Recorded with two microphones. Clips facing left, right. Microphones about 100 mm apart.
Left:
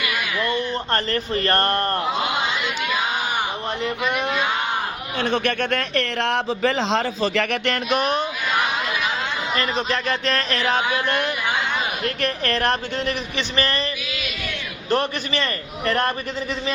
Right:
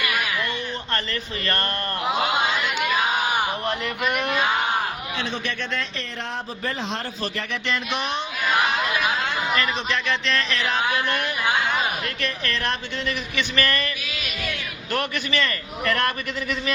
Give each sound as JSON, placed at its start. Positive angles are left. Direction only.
{"t": 0.5, "sound": "speech", "side_deg": 40}
{"t": 5.2, "sound": "a man's voice", "side_deg": 60}
{"t": 9.6, "sound": "speech", "side_deg": 40}
{"t": 13.6, "sound": "a sound", "side_deg": 30}
{"t": 14.8, "sound": "speech", "side_deg": 35}